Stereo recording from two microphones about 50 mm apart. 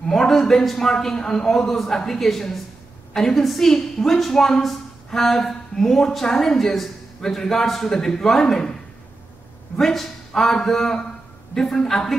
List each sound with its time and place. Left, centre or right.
0.2 s a woman's voice: centre
9.8 s a woman's voice: centre